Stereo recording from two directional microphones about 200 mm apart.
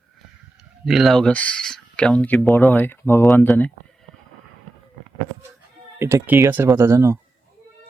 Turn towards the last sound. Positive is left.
turn(degrees=-15)  # may be behind; listen again after turning